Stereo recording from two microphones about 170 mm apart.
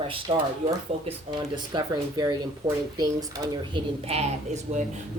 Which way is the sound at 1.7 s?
20° right (ahead or behind).